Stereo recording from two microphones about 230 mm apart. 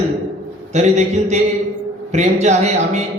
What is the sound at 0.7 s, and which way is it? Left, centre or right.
A man's voice, right.